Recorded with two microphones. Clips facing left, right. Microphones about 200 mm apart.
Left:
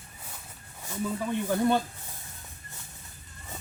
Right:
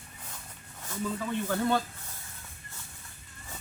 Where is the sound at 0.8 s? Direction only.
15° left (ahead or behind).